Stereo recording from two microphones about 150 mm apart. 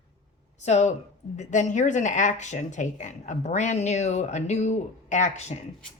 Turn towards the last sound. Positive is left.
turn(degrees=45)  # may be behind; listen again after turning